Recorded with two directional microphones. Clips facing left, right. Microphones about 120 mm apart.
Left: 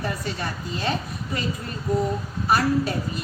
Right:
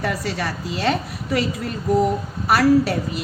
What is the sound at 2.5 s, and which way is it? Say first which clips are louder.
Speech: right 6 dB; 75° right (ahead or behind).